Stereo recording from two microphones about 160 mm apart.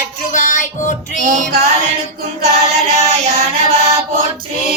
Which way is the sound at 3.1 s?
40° right (ahead or behind).